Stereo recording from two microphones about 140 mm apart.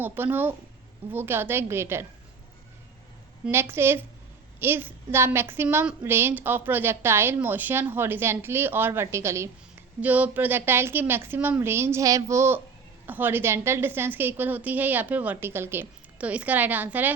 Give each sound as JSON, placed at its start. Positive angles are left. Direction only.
{"t": 0.0, "sound": "a woman's voice", "side_deg": -15}
{"t": 3.4, "sound": "a woman's voice", "side_deg": -15}